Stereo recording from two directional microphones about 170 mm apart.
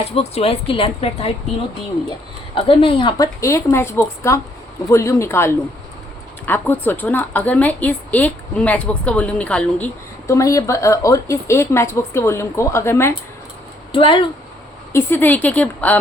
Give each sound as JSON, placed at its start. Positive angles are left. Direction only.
{"t": 0.1, "sound": "speech", "side_deg": 35}
{"t": 2.6, "sound": "a woman's voice", "side_deg": 30}
{"t": 13.9, "sound": "speech", "side_deg": 30}
{"t": 14.9, "sound": "a woman's voice", "side_deg": 10}